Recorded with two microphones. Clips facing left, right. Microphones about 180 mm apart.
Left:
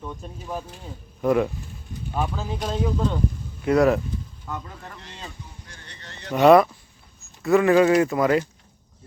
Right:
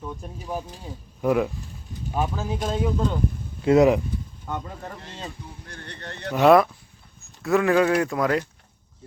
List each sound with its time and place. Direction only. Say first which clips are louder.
0.0 s speech: even; 5° right (ahead or behind)
3.6 s speech: right 2 dB; 25° right (ahead or behind)
5.6 s speech: right 7 dB; 55° right (ahead or behind)
6.3 s speech: left 2 dB; centre (ahead or behind)